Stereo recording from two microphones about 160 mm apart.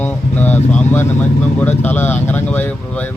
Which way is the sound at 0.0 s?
10° left (ahead or behind).